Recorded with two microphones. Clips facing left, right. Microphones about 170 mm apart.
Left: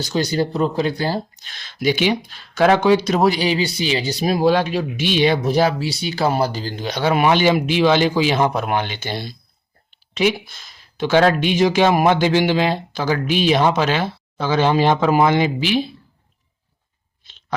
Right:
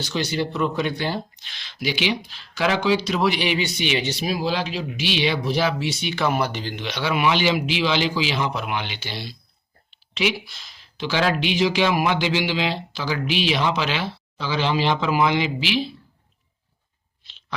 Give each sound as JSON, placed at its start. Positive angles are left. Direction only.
{"t": 0.0, "sound": "speech", "side_deg": 40}
{"t": 4.4, "sound": "speech", "side_deg": 55}